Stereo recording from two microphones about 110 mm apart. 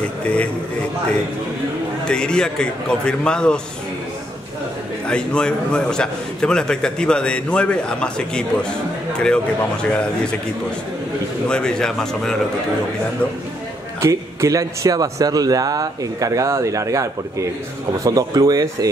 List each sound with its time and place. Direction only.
2.0 s a man's voice: 5° left (ahead or behind)
5.0 s a man's voice: 10° left (ahead or behind)
11.4 s speech: 5° left (ahead or behind)
14.0 s speech: 30° right (ahead or behind)